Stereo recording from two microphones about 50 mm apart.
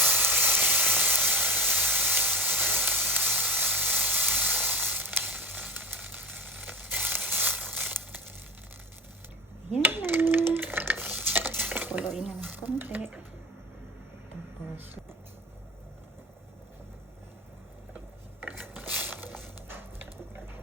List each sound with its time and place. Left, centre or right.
0.2 s steam: right
1.7 s sizzle: right
5.0 s sizzle: right
5.3 s sizzle: right
5.9 s sizzle: right
7.7 s crumpling: right
9.8 s a sound: right
11.2 s stir: right
11.6 s cutlery: right
12.4 s a sound: right
18.4 s mechanisms: right
19.6 s a sound: right